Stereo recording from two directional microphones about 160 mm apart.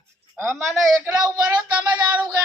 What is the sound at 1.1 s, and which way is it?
Speech, 25° right (ahead or behind).